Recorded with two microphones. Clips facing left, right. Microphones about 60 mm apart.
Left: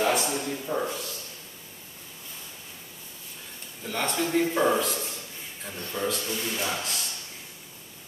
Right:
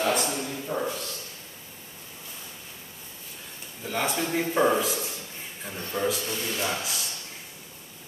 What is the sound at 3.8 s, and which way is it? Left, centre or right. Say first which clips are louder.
A man's voice: even; centre.